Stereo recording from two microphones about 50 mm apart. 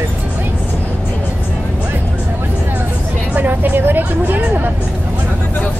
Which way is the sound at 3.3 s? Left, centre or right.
Right.